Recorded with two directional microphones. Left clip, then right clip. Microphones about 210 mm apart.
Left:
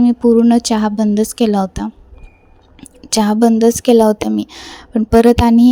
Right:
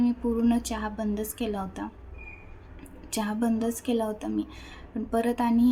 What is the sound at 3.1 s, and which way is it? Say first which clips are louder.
A woman's voice: left 16 dB; 45° left (ahead or behind).